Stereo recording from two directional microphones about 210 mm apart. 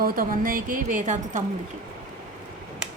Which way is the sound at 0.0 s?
40° right (ahead or behind).